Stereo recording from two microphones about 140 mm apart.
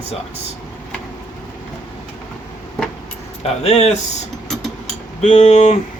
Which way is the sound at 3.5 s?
50° left (ahead or behind).